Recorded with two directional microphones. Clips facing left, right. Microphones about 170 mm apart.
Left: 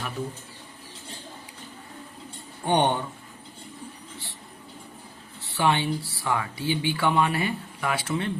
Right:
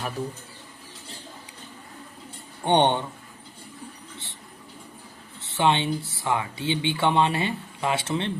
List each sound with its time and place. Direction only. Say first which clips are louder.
2.6 s speech: right 2 dB; 25° right (ahead or behind)
5.4 s speech: right 1 dB; 20° right (ahead or behind)